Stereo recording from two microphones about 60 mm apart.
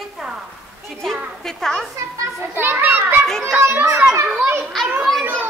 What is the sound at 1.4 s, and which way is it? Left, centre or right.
Speech, centre.